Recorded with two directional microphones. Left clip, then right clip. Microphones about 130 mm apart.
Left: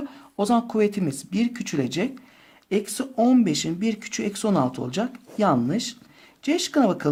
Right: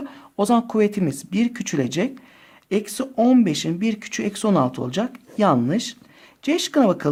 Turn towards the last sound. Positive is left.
turn(degrees=-40)  # may be behind; listen again after turning